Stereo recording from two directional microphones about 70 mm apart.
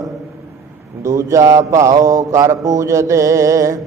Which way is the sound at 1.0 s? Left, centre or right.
Right.